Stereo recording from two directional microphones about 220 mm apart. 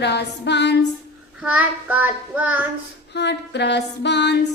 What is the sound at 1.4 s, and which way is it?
Child singing, 5° right (ahead or behind).